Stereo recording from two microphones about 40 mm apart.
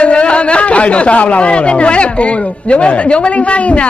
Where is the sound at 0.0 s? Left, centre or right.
Left.